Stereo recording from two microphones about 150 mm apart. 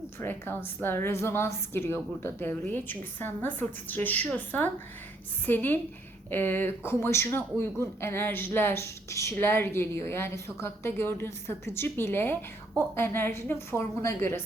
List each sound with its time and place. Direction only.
0.2 s speech: 15° left (ahead or behind)